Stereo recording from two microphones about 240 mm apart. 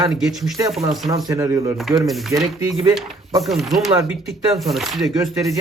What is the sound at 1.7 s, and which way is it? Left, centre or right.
Speech, centre.